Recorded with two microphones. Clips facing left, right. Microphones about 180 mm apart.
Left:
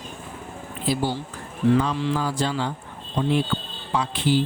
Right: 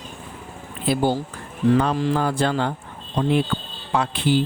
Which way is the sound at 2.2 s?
55° right (ahead or behind).